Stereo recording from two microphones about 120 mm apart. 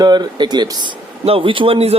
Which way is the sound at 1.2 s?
50° right (ahead or behind).